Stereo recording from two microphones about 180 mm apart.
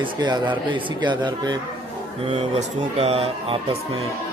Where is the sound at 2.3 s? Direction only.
35° right (ahead or behind).